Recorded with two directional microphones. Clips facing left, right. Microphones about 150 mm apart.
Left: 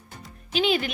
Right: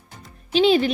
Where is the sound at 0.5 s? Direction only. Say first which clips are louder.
Right 7 dB; 35° right (ahead or behind).